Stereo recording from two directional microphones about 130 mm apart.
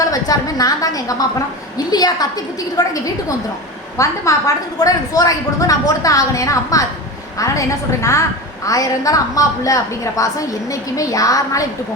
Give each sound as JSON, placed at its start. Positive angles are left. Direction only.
{"t": 0.1, "sound": "a woman's voice", "side_deg": 30}